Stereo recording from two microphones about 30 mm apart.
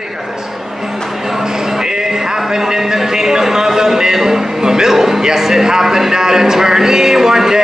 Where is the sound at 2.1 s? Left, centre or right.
Centre.